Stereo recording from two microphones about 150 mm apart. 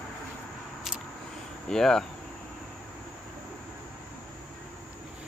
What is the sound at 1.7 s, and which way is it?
Speech, 5° left (ahead or behind).